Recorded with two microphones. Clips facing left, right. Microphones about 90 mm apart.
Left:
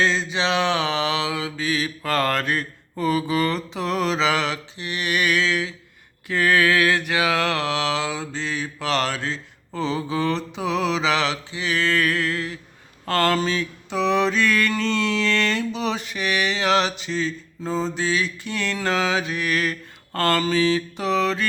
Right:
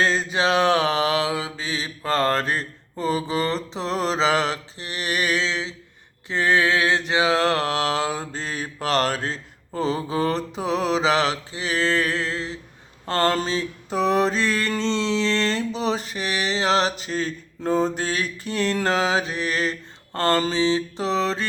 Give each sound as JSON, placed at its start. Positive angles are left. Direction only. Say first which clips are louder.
{"t": 0.0, "sound": "mantra", "louder": "right 1 dB", "side_deg": -45}